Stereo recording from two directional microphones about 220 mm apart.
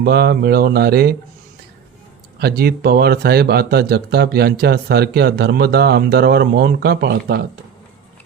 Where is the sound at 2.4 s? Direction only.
45° right (ahead or behind).